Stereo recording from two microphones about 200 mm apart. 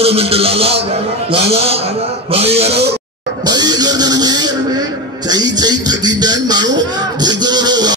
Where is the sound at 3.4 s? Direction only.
20° right (ahead or behind).